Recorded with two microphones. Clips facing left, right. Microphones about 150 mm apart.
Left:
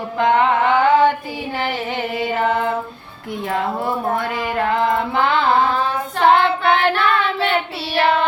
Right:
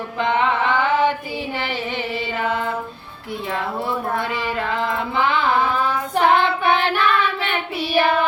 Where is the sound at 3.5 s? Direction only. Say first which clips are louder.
Left 3 dB; 50° left (ahead or behind).